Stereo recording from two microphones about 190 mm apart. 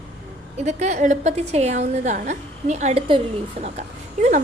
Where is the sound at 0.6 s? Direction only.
40° right (ahead or behind).